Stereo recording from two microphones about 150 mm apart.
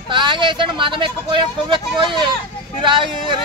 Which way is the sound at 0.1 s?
30° right (ahead or behind).